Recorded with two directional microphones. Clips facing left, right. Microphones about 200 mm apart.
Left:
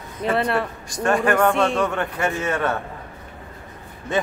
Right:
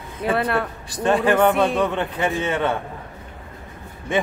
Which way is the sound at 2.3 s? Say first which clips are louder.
Right 1 dB; 20° right (ahead or behind).